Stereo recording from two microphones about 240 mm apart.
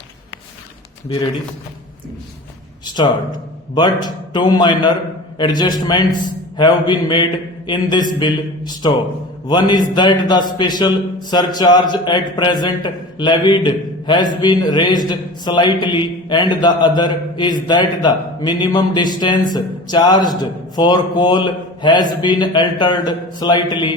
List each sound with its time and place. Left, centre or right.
2.8 s a man's voice: centre
6.6 s mantra: centre
7.7 s a man's voice: centre